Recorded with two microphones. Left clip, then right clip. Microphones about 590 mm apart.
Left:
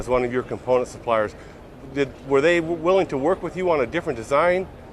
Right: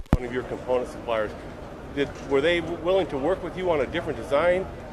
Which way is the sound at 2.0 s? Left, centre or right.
Left.